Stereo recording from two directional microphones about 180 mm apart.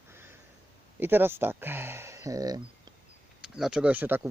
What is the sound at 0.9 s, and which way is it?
Speech, 10° right (ahead or behind).